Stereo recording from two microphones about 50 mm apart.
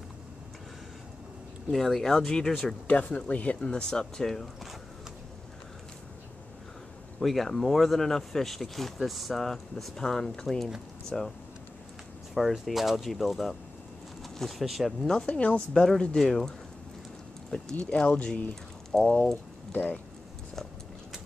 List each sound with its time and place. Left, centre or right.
1.7 s speech: centre
2.9 s speech: left
3.8 s speech: centre
7.2 s speech: centre
12.4 s speech: centre
15.2 s speech: left
16.2 s speech: centre
18.0 s speech: left
18.5 s a sound: centre
19.7 s speech: left